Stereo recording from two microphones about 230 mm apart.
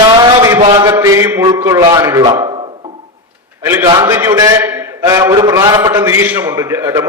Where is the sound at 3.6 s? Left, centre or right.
Centre.